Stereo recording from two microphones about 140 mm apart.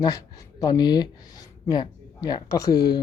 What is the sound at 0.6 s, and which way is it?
Speech, 30° left (ahead or behind).